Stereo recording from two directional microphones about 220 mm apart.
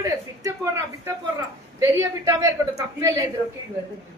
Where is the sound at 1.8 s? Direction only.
15° right (ahead or behind).